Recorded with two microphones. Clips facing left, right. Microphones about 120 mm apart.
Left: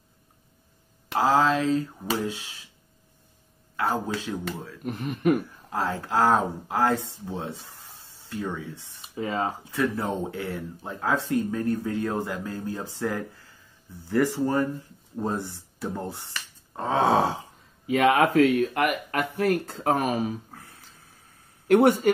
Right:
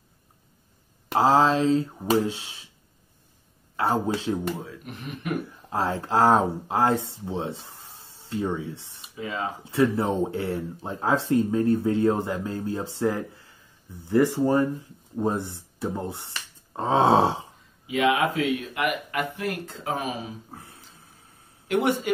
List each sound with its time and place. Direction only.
1.0 s speech: 30° right (ahead or behind)
4.8 s speech: 40° left (ahead or behind)
5.7 s speech: 25° right (ahead or behind)
9.1 s speech: 40° left (ahead or behind)
9.7 s speech: 25° right (ahead or behind)
17.8 s speech: 50° left (ahead or behind)
21.6 s speech: 45° left (ahead or behind)